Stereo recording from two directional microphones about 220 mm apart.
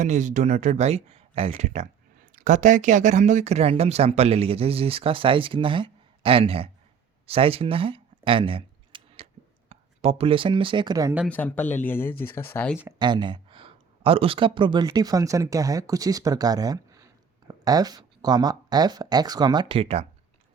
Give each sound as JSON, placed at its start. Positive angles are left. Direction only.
{"t": 0.0, "sound": "speech", "side_deg": -35}
{"t": 7.3, "sound": "a sound", "side_deg": -25}
{"t": 9.6, "sound": "speech", "side_deg": -25}
{"t": 11.3, "sound": "speech", "side_deg": 5}
{"t": 13.0, "sound": "speech", "side_deg": -20}